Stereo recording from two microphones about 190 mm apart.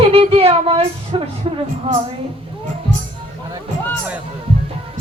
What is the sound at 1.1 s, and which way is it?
Speech, 25° right (ahead or behind).